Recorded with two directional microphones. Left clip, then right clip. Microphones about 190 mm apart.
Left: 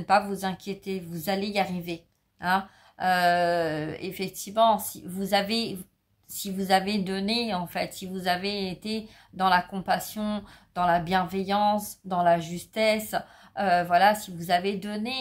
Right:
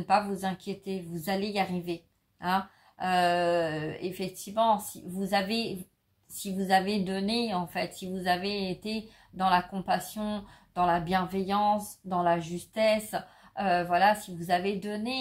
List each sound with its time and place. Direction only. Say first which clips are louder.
0.0 s a woman's voice: left 3 dB; 35° left (ahead or behind)